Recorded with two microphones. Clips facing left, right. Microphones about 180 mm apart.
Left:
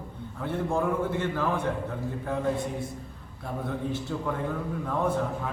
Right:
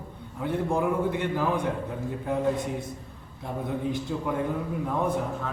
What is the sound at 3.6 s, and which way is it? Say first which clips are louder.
Speech: right 2 dB; 15° right (ahead or behind).